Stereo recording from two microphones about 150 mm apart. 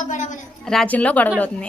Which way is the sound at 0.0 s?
55° left (ahead or behind).